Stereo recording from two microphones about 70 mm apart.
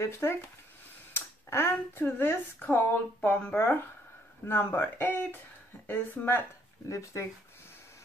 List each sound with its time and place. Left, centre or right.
0.2 s speech: left
4.5 s speech: left
6.9 s speech: left